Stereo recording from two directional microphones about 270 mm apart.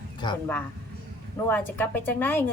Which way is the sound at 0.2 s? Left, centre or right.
Centre.